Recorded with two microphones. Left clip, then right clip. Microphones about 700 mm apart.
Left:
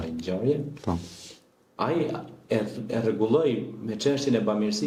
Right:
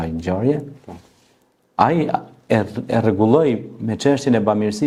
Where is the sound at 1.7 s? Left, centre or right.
Right.